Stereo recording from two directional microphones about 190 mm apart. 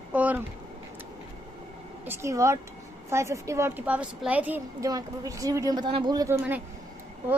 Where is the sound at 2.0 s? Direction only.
10° right (ahead or behind).